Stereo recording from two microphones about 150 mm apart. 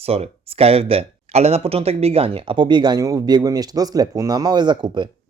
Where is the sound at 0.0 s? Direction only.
40° right (ahead or behind).